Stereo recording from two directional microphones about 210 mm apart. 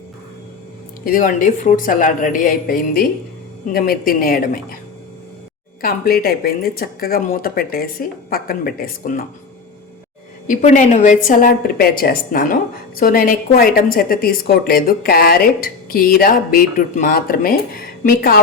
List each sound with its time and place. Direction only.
1.0 s a woman's voice: 40° left (ahead or behind)
5.8 s a woman's voice: 45° left (ahead or behind)
10.4 s a woman's voice: 35° left (ahead or behind)